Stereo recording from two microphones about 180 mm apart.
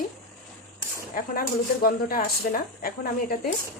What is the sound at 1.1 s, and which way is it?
Speech, 50° left (ahead or behind).